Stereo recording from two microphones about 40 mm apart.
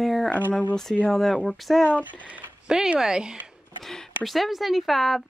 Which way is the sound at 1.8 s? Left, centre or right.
Left.